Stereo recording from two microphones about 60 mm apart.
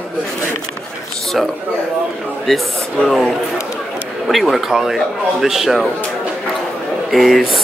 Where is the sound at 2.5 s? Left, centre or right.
Centre.